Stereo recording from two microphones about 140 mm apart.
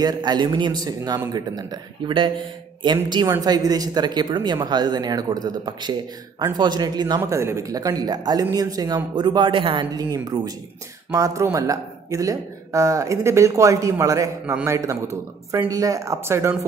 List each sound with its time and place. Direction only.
0.0 s speech: 30° right (ahead or behind)
7.2 s speech: 20° right (ahead or behind)